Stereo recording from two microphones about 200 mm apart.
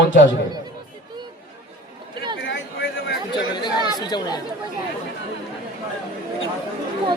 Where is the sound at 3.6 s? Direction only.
20° left (ahead or behind).